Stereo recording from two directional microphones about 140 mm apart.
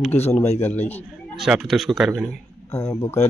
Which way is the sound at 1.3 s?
Centre (ahead or behind).